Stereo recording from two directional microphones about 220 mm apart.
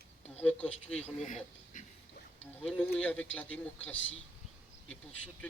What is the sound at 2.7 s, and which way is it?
Speech, 5° left (ahead or behind).